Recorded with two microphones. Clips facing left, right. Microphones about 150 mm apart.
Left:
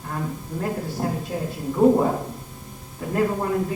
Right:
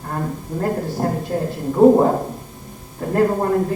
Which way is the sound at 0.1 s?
50° right (ahead or behind).